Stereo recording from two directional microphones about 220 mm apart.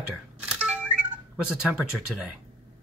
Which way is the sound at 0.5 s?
5° right (ahead or behind).